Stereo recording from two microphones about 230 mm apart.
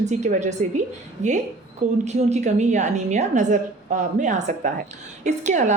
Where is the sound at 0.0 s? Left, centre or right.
Right.